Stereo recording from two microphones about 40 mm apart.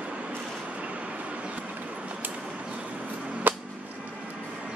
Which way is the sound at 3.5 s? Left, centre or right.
Right.